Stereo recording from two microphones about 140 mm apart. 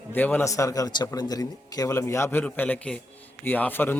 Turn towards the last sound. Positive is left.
turn(degrees=15)  # may be behind; listen again after turning